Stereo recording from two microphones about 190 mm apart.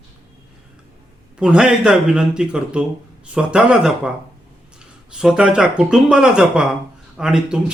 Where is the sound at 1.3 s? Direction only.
5° right (ahead or behind).